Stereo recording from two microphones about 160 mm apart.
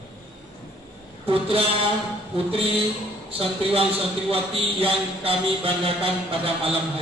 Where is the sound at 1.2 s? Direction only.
35° right (ahead or behind).